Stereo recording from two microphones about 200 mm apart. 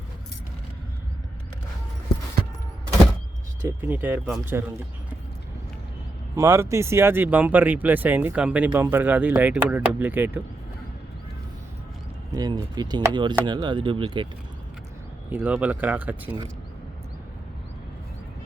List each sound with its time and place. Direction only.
3.7 s speech: 10° right (ahead or behind)
6.3 s speech: 15° right (ahead or behind)
12.3 s speech: 20° right (ahead or behind)
15.3 s speech: 10° right (ahead or behind)